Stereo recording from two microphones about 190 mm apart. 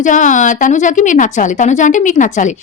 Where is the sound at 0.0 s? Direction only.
40° left (ahead or behind).